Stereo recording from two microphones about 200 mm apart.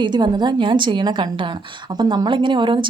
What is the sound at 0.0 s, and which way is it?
A woman's voice, 20° right (ahead or behind).